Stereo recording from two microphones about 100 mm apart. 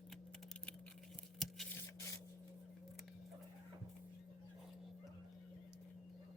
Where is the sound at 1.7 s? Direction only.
25° left (ahead or behind).